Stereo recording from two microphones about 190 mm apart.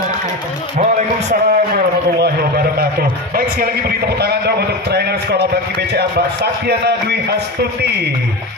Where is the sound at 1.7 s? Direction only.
55° right (ahead or behind).